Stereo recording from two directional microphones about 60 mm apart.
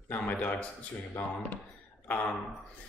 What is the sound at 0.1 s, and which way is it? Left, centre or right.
Speech, left.